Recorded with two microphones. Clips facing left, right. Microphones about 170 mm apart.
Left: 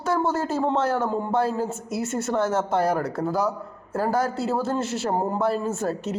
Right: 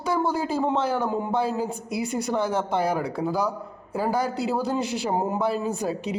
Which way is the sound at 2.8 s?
10° right (ahead or behind).